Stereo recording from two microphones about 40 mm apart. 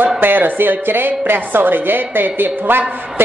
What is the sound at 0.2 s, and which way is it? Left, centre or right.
A woman's voice, right.